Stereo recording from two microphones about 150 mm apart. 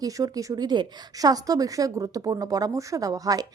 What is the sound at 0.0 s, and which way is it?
A woman's voice, 25° right (ahead or behind).